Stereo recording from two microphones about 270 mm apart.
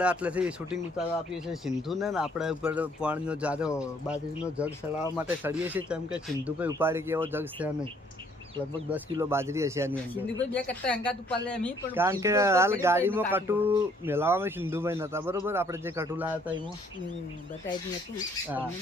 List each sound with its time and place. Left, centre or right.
0.0 s speech: centre
8.9 s speech: centre
10.5 s speech: centre
11.9 s speech: centre